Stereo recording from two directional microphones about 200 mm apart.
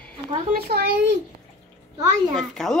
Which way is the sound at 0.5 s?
50° right (ahead or behind).